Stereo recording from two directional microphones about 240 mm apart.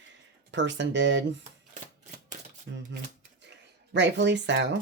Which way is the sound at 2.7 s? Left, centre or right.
Right.